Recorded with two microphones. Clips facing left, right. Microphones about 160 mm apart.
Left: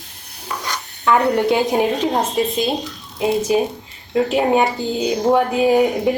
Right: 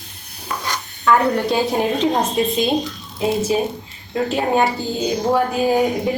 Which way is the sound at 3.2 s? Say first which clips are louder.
Left 2 dB; 15° left (ahead or behind).